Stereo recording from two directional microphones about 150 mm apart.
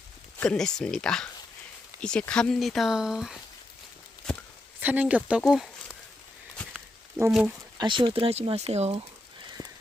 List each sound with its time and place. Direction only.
0.3 s speech: 5° left (ahead or behind)
4.8 s speech: 10° right (ahead or behind)
7.3 s speech: 5° right (ahead or behind)
7.8 s speech: 35° right (ahead or behind)
9.6 s crow: 20° left (ahead or behind)